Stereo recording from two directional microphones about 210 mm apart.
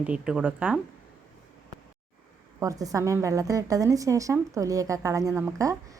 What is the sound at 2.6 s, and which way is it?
Speech, 15° right (ahead or behind).